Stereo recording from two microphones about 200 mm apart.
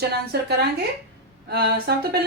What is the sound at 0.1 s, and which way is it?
A woman's voice, 55° right (ahead or behind).